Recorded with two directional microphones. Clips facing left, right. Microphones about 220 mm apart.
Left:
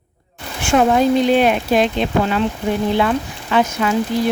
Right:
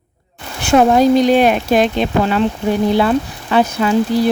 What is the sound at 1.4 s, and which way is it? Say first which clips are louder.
Speech: right 2 dB; 50° right (ahead or behind).